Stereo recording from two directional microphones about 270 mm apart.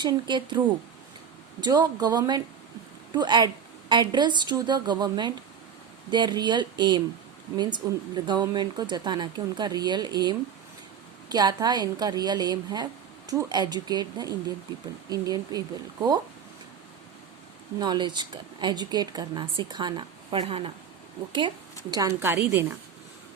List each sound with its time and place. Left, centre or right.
0.0 s a woman's voice: centre
1.6 s a woman's voice: centre
17.7 s a woman's voice: centre
21.8 s a woman's voice: centre